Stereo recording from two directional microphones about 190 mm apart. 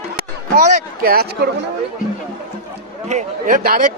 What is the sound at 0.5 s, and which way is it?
Speech, 45° right (ahead or behind).